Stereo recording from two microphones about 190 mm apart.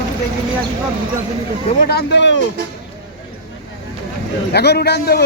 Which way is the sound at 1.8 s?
55° left (ahead or behind).